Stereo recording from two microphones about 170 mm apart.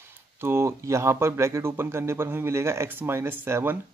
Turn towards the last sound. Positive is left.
turn(degrees=-15)  # may be behind; listen again after turning